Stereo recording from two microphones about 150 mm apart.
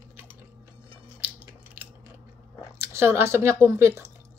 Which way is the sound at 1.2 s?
10° right (ahead or behind).